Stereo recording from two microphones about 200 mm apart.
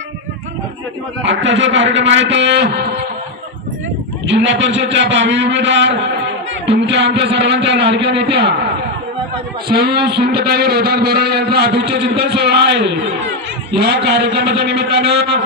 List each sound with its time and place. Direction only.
1.2 s a man's voice: 65° right (ahead or behind)
4.3 s a man's voice: 65° right (ahead or behind)
9.7 s a man's voice: 50° right (ahead or behind)